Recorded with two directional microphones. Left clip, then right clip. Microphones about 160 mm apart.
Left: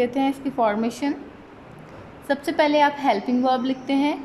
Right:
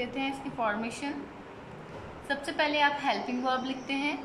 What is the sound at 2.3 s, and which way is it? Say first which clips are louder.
A woman's voice: left 9 dB; 40° left (ahead or behind).